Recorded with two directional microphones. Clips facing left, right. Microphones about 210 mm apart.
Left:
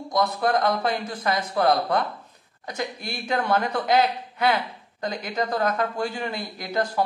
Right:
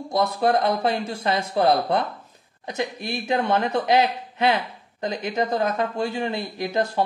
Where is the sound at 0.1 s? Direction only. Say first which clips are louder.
Right 2 dB; 25° right (ahead or behind).